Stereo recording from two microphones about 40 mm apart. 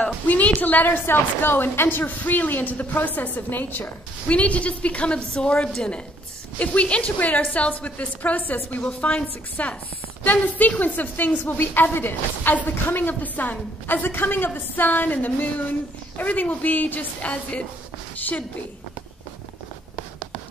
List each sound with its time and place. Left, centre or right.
0.0 s a sound: left
0.6 s a woman's voice: left
2.0 s a woman's voice: left
4.3 s a woman's voice: left
6.6 s a woman's voice: left
8.8 s a woman's voice: left
14.0 s a woman's voice: left
18.1 s a sound: left